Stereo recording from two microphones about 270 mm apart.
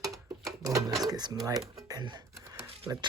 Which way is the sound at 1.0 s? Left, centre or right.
Centre.